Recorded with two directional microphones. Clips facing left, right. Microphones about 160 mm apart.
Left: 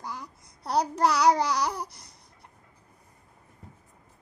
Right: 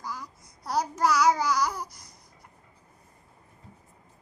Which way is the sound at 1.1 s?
70° left (ahead or behind).